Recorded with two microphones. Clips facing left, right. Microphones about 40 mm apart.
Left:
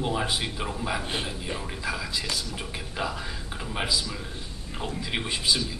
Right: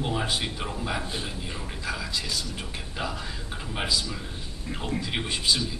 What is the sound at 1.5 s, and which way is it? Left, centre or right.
Speech, centre.